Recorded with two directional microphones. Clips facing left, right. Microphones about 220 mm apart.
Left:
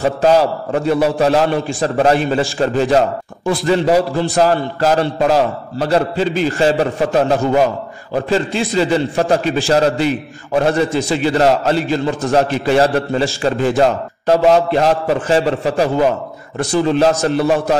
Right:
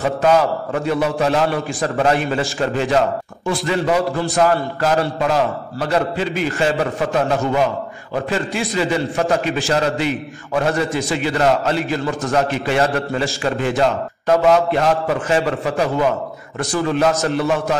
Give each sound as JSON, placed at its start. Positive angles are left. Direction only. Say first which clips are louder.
{"t": 0.0, "sound": "a man's voice", "louder": "left 3 dB", "side_deg": 30}